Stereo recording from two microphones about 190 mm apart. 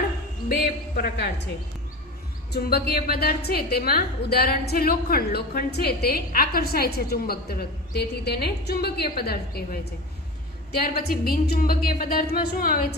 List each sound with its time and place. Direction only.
0.9 s a woman's voice: 55° left (ahead or behind)
2.5 s a woman's voice: 55° left (ahead or behind)
10.7 s a woman's voice: 55° left (ahead or behind)